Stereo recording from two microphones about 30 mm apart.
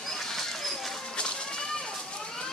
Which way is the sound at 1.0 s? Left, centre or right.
Left.